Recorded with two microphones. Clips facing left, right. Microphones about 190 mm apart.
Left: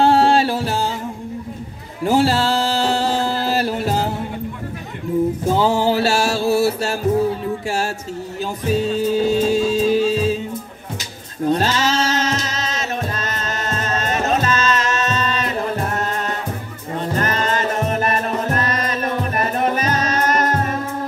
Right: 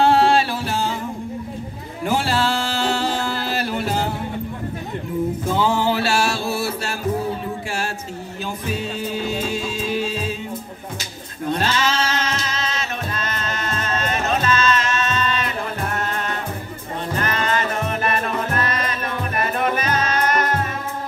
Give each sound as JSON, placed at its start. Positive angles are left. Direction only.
{"t": 0.0, "sound": "music", "side_deg": 40}
{"t": 2.0, "sound": "music", "side_deg": 35}
{"t": 5.5, "sound": "mantra", "side_deg": 40}
{"t": 8.6, "sound": "music", "side_deg": 40}
{"t": 11.4, "sound": "music", "side_deg": 40}